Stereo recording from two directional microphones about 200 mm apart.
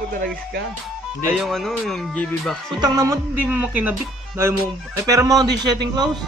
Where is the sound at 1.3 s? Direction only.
Centre (ahead or behind).